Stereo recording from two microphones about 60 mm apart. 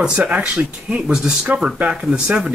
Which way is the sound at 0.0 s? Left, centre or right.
Centre.